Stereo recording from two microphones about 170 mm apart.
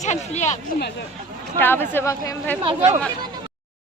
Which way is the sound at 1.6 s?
10° left (ahead or behind).